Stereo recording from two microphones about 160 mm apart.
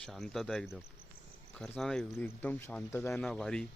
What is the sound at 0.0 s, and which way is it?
Speech, centre (ahead or behind).